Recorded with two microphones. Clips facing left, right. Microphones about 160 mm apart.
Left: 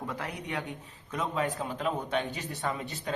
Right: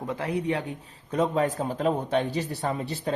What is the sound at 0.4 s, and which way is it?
A man's voice, 35° right (ahead or behind).